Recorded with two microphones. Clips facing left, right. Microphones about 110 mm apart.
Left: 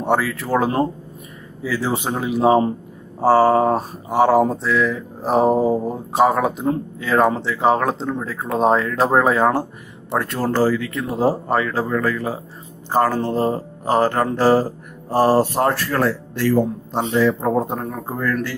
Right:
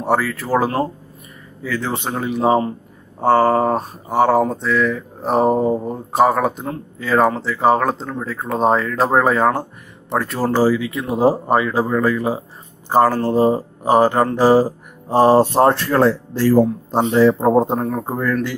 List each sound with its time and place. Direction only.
0.0 s speech: centre (ahead or behind); by 17.7 s 25° right (ahead or behind)
17.9 s speech: 15° right (ahead or behind)